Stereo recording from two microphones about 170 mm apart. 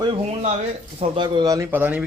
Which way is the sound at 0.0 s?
35° right (ahead or behind).